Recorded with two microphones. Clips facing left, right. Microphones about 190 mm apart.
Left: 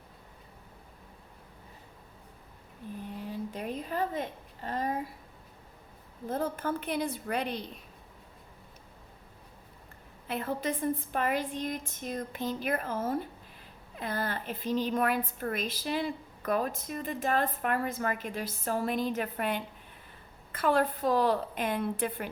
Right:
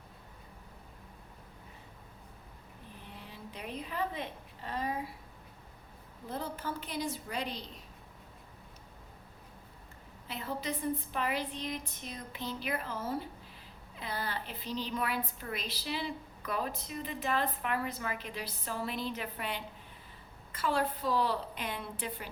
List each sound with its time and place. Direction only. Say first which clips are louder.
3.1 s a sound: left 10 dB; 45° left (ahead or behind)
6.2 s a woman's voice: left 6 dB; 50° left (ahead or behind)
10.2 s a woman's voice: left 5 dB; 55° left (ahead or behind)